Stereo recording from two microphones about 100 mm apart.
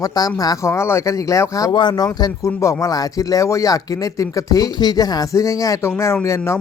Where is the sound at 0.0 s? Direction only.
40° left (ahead or behind).